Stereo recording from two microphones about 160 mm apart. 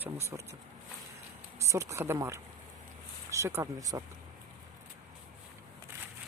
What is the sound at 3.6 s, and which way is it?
Speech, 20° right (ahead or behind).